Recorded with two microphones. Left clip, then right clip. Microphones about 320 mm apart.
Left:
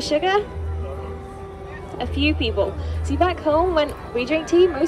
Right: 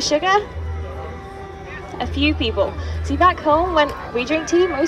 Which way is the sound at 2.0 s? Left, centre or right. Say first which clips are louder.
Right 2 dB; right.